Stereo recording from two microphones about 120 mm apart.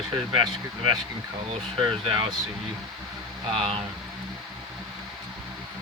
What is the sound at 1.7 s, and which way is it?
Speech, 40° right (ahead or behind).